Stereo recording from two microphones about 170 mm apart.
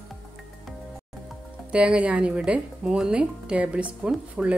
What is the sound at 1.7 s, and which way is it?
Speech, 5° right (ahead or behind).